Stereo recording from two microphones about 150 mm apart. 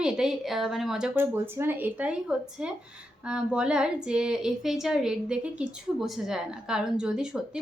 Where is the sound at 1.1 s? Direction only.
15° right (ahead or behind).